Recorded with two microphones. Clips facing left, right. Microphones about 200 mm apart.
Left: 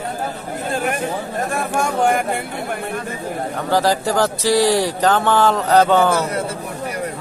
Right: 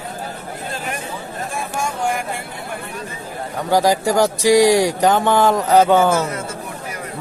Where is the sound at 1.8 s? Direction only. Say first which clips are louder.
Left 5 dB; 60° left (ahead or behind).